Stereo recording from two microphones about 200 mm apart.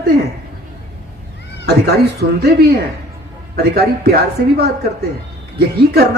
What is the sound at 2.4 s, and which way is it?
A woman's voice, 55° right (ahead or behind).